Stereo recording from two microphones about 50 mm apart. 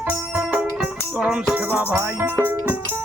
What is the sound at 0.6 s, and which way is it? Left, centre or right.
Music, centre.